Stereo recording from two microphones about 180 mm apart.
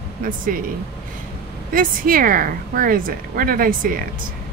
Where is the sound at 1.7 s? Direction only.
50° right (ahead or behind).